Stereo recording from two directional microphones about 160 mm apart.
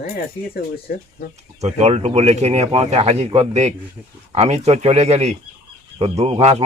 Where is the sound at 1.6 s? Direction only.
45° right (ahead or behind).